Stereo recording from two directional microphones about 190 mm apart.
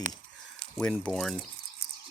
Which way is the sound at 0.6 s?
5° left (ahead or behind).